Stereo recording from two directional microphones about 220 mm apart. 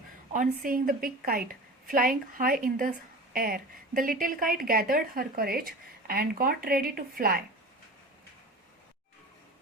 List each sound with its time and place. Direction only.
0.3 s a woman's voice: 40° right (ahead or behind)